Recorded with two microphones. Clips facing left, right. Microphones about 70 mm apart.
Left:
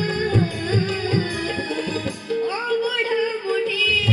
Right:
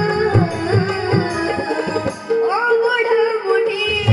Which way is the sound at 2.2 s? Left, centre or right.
Right.